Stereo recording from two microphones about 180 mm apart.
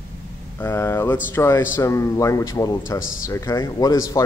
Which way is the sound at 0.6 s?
15° left (ahead or behind).